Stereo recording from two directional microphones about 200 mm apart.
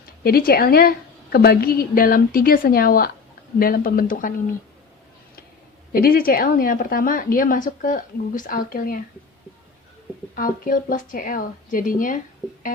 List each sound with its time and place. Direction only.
0.2 s a woman's voice: 50° left (ahead or behind)
5.9 s a woman's voice: 50° left (ahead or behind)
10.3 s a woman's voice: 45° left (ahead or behind)